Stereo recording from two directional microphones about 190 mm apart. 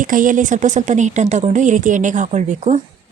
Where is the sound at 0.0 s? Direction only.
45° right (ahead or behind).